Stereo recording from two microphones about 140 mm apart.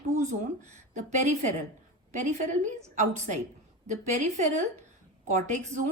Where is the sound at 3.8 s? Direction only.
60° right (ahead or behind).